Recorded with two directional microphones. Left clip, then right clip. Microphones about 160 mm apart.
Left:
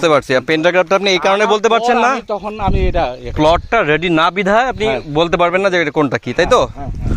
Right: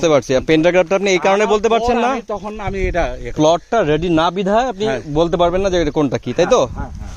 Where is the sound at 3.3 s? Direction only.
20° right (ahead or behind).